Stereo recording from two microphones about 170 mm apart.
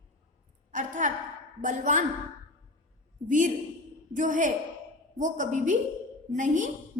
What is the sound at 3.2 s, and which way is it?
A woman's voice, 50° right (ahead or behind).